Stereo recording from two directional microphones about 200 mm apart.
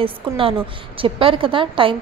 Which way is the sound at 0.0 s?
25° right (ahead or behind).